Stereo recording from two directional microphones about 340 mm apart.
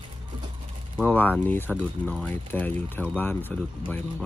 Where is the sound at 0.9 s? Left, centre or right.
Centre.